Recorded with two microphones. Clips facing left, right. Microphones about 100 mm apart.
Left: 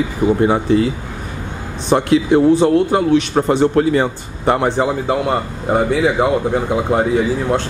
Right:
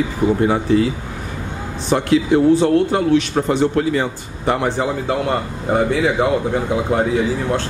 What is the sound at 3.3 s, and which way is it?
A man's voice, 40° left (ahead or behind).